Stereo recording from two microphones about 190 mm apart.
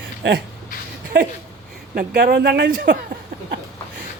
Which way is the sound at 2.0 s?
55° right (ahead or behind).